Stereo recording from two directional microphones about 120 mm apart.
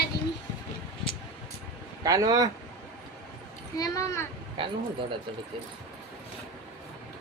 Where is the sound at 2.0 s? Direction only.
30° right (ahead or behind).